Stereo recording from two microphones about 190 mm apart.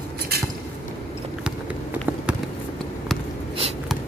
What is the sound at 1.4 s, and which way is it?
Run, 5° right (ahead or behind).